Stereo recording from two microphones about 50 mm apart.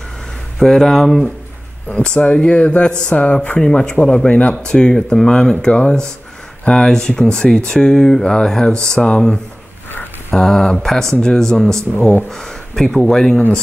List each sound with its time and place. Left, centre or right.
0.6 s speech: centre
1.9 s speech: left
4.3 s speech: left
10.3 s speech: centre